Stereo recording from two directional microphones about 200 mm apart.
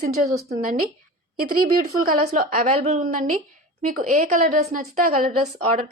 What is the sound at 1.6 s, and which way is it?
A woman's voice, 45° right (ahead or behind).